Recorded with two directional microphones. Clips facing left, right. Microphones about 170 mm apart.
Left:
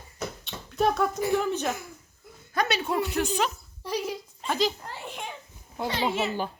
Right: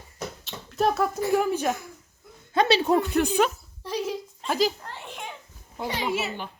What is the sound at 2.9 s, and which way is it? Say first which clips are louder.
Speech: right 5 dB; 50° right (ahead or behind).